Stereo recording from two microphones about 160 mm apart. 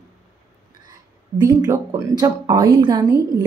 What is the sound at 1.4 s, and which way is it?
A woman's voice, 25° right (ahead or behind).